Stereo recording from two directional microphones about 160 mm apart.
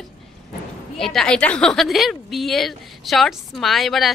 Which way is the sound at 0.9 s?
Centre (ahead or behind).